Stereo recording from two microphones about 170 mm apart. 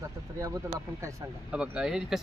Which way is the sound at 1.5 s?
5° right (ahead or behind).